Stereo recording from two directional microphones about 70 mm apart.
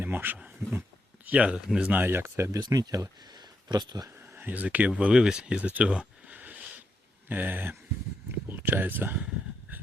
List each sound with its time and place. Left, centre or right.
0.0 s speech: right
1.2 s speech: centre
1.9 s speech: right
2.6 s speech: right
4.1 s speech: right